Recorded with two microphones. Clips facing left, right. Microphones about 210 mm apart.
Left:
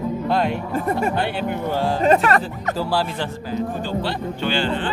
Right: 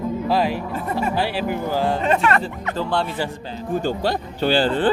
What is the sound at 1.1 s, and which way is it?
Speech, centre (ahead or behind).